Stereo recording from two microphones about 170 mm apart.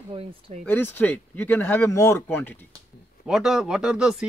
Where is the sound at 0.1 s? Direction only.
35° right (ahead or behind).